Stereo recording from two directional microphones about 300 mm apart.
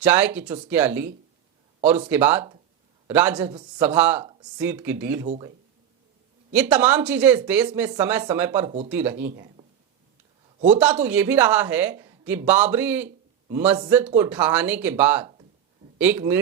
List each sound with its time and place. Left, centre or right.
0.0 s speech: centre
2.0 s speech: centre
5.2 s speech: right
6.5 s speech: centre
8.6 s speech: right
8.9 s speech: centre
9.3 s a sound: centre
10.8 s speech: centre